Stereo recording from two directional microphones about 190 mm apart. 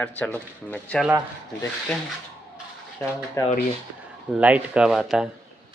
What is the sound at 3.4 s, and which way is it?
Speech, 15° left (ahead or behind).